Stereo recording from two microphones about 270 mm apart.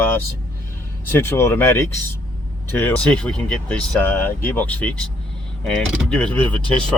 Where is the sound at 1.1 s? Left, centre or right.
Centre.